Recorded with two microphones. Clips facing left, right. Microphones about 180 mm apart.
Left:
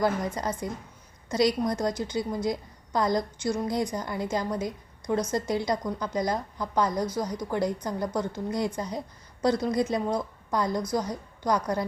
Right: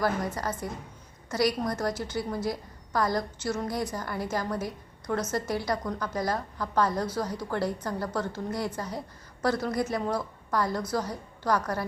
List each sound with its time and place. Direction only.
0.3 s a woman's voice: 20° left (ahead or behind)